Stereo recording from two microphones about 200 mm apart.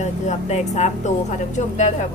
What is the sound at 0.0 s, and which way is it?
Speech, 35° left (ahead or behind).